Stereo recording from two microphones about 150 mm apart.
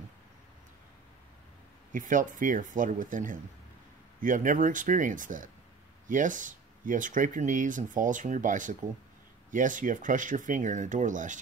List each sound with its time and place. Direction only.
1.9 s speech: 60° right (ahead or behind)